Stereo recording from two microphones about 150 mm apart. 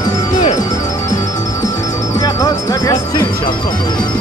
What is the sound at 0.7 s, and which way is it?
Music, 25° left (ahead or behind).